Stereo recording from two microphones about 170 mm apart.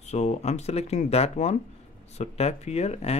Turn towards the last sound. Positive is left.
turn(degrees=40)  # may be behind; listen again after turning